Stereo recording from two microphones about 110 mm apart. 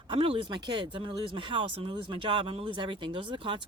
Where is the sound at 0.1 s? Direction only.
55° right (ahead or behind).